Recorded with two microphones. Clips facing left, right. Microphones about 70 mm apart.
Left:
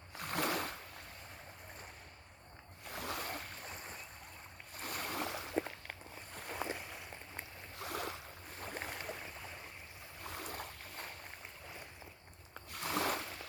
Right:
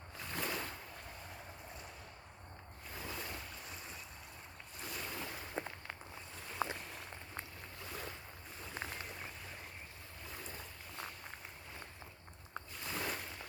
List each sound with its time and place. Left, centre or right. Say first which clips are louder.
0.2 s a sound: left 5 dB; left
2.9 s waves: left 4 dB; left
4.8 s boat: left 4 dB; left
6.3 s boat: left 6 dB; left
7.8 s boat: left 6 dB; left
8.6 s boat: left 2 dB; left
10.2 s boat: left 5 dB; left
12.7 s a sound: left 6 dB; left